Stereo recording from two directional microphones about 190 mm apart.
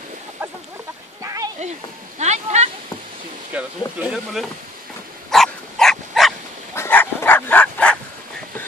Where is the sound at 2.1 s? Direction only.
35° right (ahead or behind).